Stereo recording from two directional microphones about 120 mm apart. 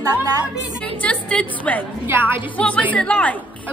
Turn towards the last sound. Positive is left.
turn(degrees=10)  # may be behind; listen again after turning